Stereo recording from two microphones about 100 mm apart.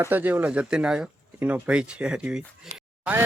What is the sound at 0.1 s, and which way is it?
Speech, 15° right (ahead or behind).